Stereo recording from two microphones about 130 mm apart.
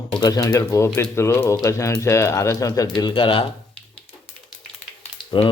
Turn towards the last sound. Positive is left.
turn(degrees=45)  # may be behind; listen again after turning